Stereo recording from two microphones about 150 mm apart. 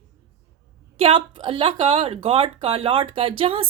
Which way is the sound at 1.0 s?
35° right (ahead or behind).